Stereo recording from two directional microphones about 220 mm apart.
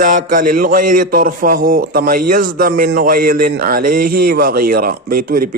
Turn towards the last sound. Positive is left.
turn(degrees=-40)  # may be behind; listen again after turning